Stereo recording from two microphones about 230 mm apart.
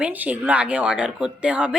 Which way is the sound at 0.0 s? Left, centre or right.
Centre.